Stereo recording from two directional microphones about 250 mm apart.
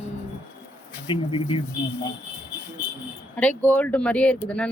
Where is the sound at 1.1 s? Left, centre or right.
Left.